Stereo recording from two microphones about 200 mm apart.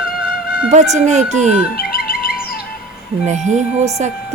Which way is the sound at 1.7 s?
50° left (ahead or behind).